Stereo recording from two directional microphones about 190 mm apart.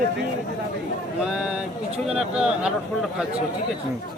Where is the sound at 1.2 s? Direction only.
5° right (ahead or behind).